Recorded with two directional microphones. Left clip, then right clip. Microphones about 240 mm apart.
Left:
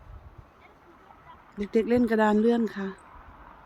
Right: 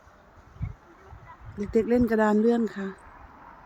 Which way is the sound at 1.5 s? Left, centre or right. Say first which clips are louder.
Right 1 dB; centre.